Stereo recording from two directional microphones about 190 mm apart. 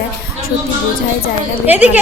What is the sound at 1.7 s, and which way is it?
Speech, 10° right (ahead or behind).